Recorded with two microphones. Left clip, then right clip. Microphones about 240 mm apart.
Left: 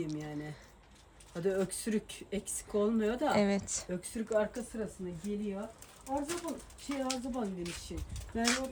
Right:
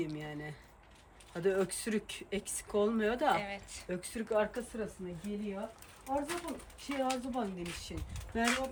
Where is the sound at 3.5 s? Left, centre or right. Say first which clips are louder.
Left 8 dB; centre.